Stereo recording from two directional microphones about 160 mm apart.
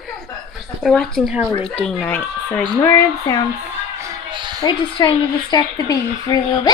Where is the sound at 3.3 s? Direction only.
20° left (ahead or behind).